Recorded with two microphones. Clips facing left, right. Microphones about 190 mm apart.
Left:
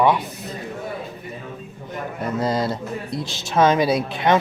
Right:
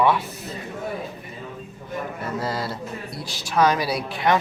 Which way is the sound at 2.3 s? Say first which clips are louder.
Left 7 dB; 20° left (ahead or behind).